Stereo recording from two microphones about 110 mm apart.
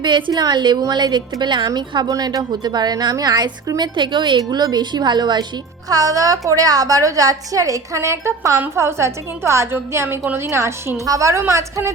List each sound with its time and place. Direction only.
0.0 s a woman's voice: 45° right (ahead or behind); by 11.9 s 25° right (ahead or behind)